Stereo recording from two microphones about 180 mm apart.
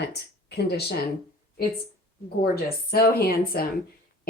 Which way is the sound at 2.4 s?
55° left (ahead or behind).